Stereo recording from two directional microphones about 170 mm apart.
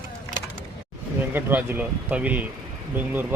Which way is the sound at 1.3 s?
10° right (ahead or behind).